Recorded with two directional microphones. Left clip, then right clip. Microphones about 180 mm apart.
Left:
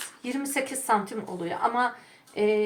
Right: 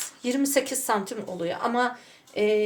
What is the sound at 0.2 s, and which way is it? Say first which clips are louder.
A woman's voice: right 5 dB; 55° right (ahead or behind).